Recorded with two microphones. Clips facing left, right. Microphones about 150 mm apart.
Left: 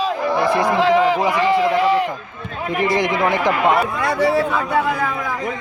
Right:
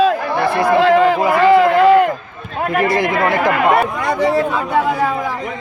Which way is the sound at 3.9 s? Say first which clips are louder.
Right 1 dB; 20° right (ahead or behind).